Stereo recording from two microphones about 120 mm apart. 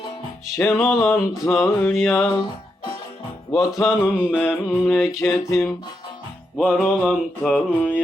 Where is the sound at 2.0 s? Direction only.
20° left (ahead or behind).